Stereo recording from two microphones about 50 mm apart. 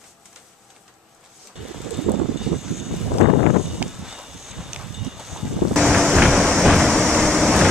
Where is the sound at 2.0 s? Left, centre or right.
Centre.